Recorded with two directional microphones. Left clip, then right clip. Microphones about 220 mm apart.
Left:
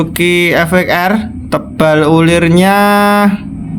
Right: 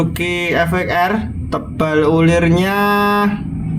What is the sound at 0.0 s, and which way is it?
Speech, 40° left (ahead or behind).